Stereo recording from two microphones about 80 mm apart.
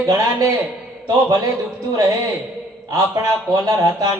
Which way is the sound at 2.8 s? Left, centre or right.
Right.